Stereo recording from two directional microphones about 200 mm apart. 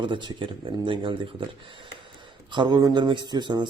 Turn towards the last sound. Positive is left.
turn(degrees=-20)  # may be behind; listen again after turning